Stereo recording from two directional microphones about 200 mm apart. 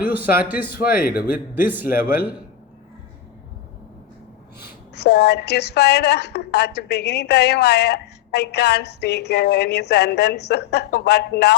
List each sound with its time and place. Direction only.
0.7 s speech: 45° left (ahead or behind)
1.1 s a man's voice: 10° right (ahead or behind)
1.9 s speech: 45° left (ahead or behind)
4.9 s a woman's voice: 55° left (ahead or behind)